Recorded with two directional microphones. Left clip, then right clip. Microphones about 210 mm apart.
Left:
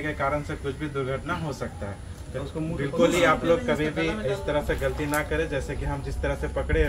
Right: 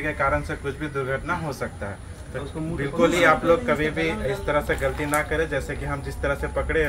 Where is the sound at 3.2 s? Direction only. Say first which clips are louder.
Right 3 dB; centre (ahead or behind).